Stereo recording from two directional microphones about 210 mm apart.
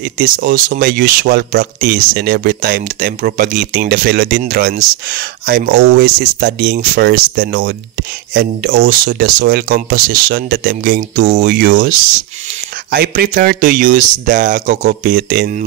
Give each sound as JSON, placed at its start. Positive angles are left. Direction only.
{"t": 0.0, "sound": "speech", "side_deg": -45}